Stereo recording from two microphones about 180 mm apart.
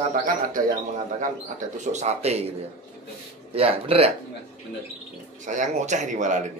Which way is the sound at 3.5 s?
30° right (ahead or behind).